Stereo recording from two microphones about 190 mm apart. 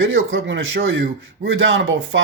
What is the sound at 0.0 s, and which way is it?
Speech, 90° right.